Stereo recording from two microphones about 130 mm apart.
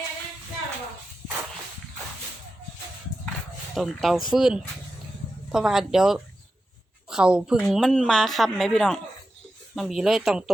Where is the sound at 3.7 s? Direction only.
Centre (ahead or behind).